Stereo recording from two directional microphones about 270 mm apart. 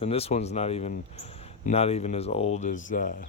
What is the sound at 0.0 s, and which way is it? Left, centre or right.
Speech, left.